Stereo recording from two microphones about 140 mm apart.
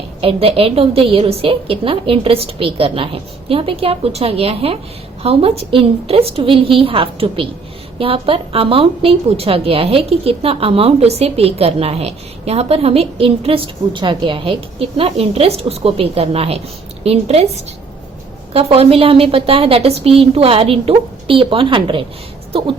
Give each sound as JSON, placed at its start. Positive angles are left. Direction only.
{"t": 0.2, "sound": "a woman's voice", "side_deg": -40}
{"t": 18.5, "sound": "a woman's voice", "side_deg": -45}